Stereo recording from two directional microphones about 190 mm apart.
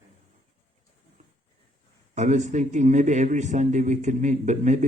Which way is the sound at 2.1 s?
40° right (ahead or behind).